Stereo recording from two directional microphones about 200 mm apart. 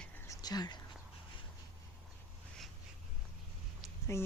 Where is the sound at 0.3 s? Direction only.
20° left (ahead or behind).